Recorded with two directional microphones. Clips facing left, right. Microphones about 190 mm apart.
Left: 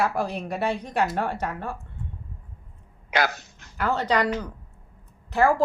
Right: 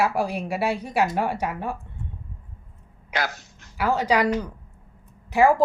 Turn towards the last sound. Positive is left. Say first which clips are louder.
# right 3 dB
turn(degrees=-15)  # may be behind; listen again after turning